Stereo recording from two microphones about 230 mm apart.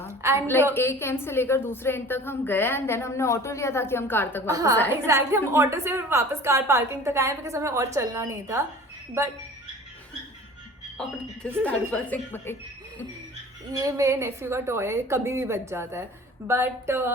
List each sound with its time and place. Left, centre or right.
0.2 s a woman's voice: centre
0.7 s a woman's voice: centre
4.5 s a woman's voice: centre
11.0 s a woman's voice: centre
13.7 s a woman's voice: centre